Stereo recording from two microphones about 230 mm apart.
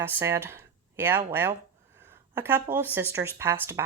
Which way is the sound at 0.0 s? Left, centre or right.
Centre.